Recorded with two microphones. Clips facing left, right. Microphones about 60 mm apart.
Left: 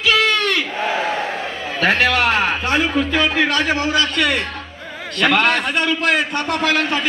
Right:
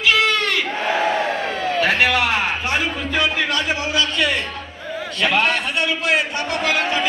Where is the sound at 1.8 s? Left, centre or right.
Left.